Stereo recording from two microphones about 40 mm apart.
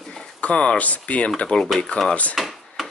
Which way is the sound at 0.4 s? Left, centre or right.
Left.